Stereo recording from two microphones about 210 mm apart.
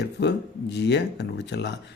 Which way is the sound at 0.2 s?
55° left (ahead or behind).